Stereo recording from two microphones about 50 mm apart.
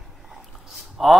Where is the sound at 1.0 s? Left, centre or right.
Centre.